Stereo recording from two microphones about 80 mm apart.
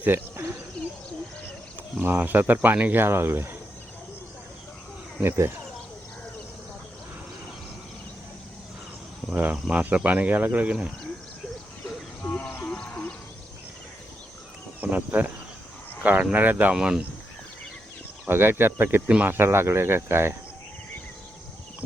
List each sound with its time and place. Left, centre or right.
0.0 s speech: right
2.0 s speech: right
5.2 s speech: right
9.3 s speech: centre
12.2 s a sound: centre
14.8 s speech: right
16.7 s speech: centre
18.3 s speech: right